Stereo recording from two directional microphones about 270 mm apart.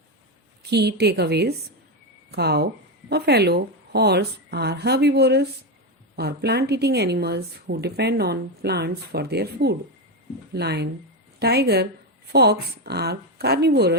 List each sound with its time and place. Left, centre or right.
0.7 s a woman's voice: right